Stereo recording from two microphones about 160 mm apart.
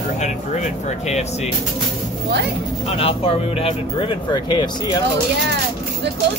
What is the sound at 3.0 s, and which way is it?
Speech, 35° left (ahead or behind).